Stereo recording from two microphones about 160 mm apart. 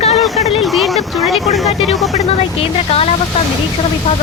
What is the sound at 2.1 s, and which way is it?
Speech, 40° left (ahead or behind).